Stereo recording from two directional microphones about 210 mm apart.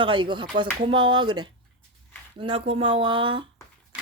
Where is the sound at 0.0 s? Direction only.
25° right (ahead or behind).